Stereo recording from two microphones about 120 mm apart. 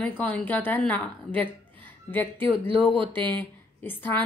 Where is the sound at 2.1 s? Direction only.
15° left (ahead or behind).